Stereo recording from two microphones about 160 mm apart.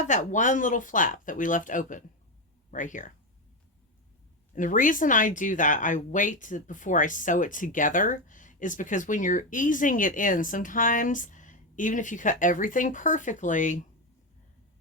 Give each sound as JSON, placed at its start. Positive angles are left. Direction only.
{"t": 0.0, "sound": "speech", "side_deg": 50}
{"t": 4.5, "sound": "speech", "side_deg": 55}